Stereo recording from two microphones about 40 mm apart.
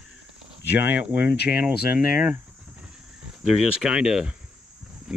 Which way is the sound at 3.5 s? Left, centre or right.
Right.